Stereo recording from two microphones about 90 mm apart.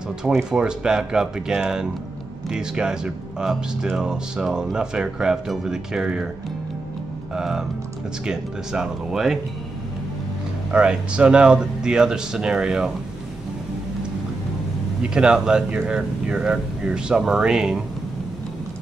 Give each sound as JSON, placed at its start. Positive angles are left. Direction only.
{"t": 0.2, "sound": "speech", "side_deg": -5}
{"t": 7.3, "sound": "speech", "side_deg": -5}
{"t": 10.7, "sound": "speech", "side_deg": -10}
{"t": 15.0, "sound": "speech", "side_deg": -10}